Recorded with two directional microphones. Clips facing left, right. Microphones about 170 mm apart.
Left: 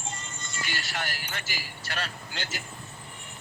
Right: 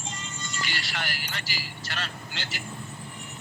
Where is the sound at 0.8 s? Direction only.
45° left (ahead or behind).